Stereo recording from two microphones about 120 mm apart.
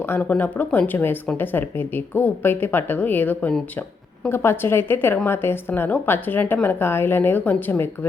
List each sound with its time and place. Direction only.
0.0 s a woman's voice: 15° left (ahead or behind)